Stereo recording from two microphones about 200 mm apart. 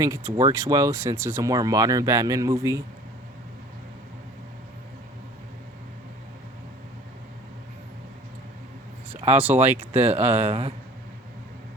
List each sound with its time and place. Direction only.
0.3 s speech: 15° right (ahead or behind)
9.4 s speech: 10° right (ahead or behind)
10.5 s speech: 30° right (ahead or behind)